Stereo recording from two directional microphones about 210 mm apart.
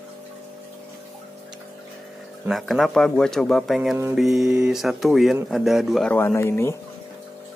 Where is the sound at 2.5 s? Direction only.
Centre (ahead or behind).